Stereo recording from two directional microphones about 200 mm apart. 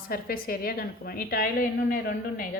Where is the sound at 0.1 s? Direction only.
45° left (ahead or behind).